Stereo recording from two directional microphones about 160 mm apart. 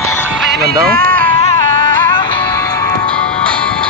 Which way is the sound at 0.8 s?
70° right (ahead or behind).